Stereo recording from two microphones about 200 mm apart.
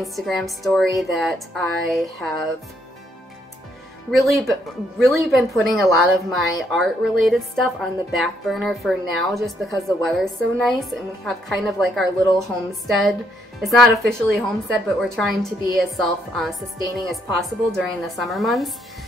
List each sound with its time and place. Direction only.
0.0 s speech: centre (ahead or behind)
4.1 s speech: centre (ahead or behind)